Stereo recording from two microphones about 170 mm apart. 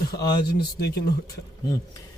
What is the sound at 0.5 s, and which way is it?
Speech, 70° left (ahead or behind).